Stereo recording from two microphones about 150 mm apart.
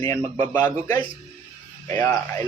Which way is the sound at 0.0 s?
15° left (ahead or behind).